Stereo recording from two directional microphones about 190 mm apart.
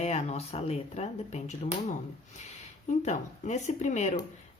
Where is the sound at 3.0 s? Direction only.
40° left (ahead or behind).